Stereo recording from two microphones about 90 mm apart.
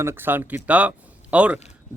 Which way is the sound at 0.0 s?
25° right (ahead or behind).